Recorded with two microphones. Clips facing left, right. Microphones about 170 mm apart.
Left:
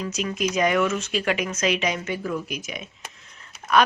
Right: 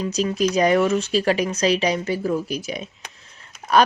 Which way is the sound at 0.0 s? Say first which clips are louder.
Right 5 dB; 30° right (ahead or behind).